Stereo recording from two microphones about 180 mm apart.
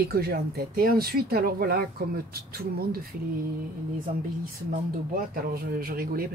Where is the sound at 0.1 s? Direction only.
60° right (ahead or behind).